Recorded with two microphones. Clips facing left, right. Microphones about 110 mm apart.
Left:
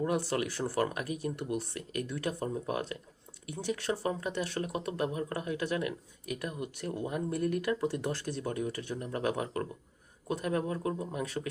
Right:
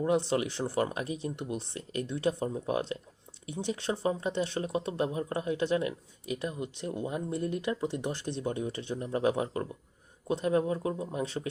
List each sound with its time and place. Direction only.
0.0 s speech: 25° right (ahead or behind)